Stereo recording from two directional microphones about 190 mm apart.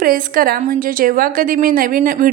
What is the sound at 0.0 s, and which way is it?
A woman's voice, 50° right (ahead or behind).